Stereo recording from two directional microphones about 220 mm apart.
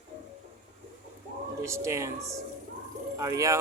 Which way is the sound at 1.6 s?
15° right (ahead or behind).